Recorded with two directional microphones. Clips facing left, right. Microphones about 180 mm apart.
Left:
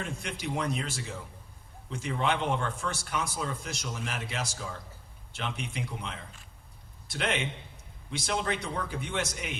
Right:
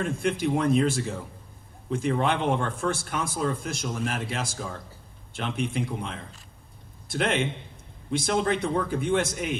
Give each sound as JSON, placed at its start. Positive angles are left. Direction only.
{"t": 0.2, "sound": "speech", "side_deg": -55}